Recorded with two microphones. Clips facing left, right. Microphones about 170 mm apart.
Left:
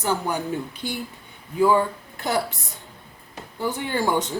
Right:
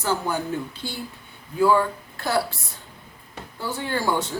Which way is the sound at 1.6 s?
20° left (ahead or behind).